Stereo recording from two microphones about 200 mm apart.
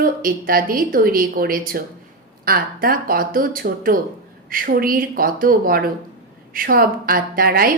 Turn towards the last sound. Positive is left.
turn(degrees=-50)  # may be behind; listen again after turning